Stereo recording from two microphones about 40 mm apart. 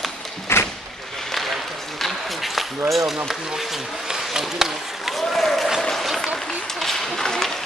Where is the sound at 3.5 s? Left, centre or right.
Centre.